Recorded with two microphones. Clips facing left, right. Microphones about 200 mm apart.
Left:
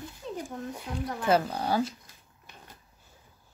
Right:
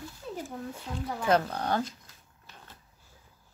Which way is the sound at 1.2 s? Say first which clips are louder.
Left 1 dB; 10° left (ahead or behind).